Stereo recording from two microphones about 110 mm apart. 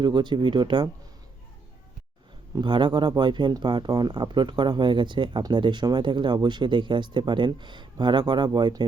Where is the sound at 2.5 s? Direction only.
45° right (ahead or behind).